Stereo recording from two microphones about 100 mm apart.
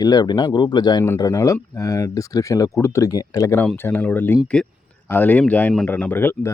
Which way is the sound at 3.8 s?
20° left (ahead or behind).